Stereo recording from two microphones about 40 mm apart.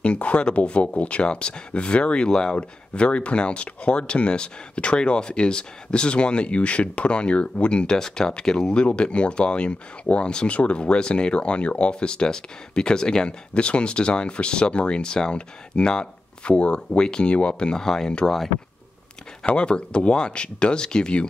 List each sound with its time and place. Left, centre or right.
0.0 s speech: left
2.5 s speech: left
19.4 s speech: left